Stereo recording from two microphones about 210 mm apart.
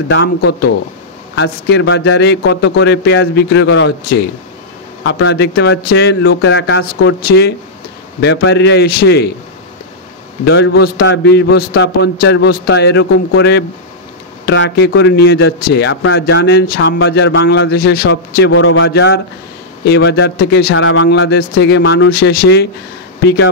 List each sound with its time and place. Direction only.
0.1 s a man's voice: 55° left (ahead or behind)
10.4 s a man's voice: 50° left (ahead or behind)
17.0 s a man's voice: 60° left (ahead or behind)
18.5 s speech: 70° left (ahead or behind)
18.9 s a man's voice: 55° left (ahead or behind)
20.7 s speech: 75° left (ahead or behind)
21.2 s a man's voice: 50° left (ahead or behind)